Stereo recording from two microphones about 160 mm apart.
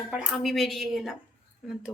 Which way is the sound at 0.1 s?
5° right (ahead or behind).